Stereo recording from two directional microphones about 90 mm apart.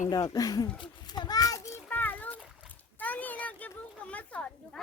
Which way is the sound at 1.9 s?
20° left (ahead or behind).